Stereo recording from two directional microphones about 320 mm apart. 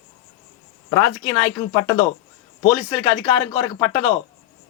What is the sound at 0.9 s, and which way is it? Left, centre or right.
A man's voice, centre.